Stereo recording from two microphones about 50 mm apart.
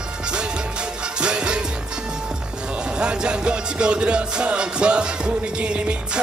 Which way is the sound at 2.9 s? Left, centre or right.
Centre.